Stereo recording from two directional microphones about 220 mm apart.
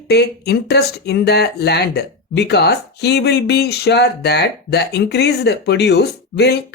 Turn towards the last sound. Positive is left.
turn(degrees=50)  # may be behind; listen again after turning